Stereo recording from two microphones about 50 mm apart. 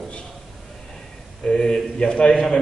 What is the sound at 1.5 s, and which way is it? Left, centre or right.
Speech, centre.